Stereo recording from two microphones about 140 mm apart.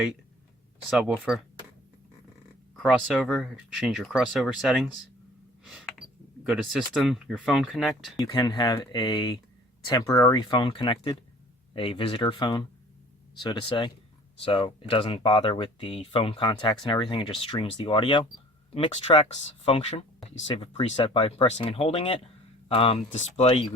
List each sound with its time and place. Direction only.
0.9 s speech: 5° right (ahead or behind)
3.1 s speech: 5° right (ahead or behind)
8.2 s speech: 30° left (ahead or behind)
18.9 s speech: 50° left (ahead or behind)